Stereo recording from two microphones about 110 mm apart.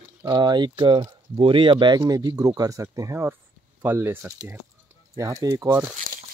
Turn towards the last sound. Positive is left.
turn(degrees=-30)  # may be behind; listen again after turning